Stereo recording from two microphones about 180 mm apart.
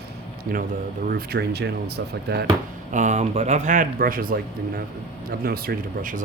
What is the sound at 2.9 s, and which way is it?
Speech, 40° right (ahead or behind).